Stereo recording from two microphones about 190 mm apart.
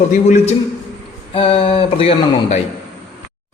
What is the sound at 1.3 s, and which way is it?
Speech, 30° left (ahead or behind).